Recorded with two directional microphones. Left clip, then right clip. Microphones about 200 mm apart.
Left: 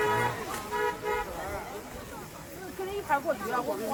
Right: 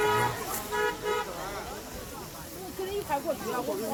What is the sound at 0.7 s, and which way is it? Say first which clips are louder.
Vehicle: right 1 dB; 55° left (ahead or behind).